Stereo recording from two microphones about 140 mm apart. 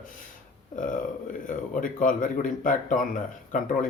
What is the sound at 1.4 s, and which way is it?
Speech, 75° left (ahead or behind).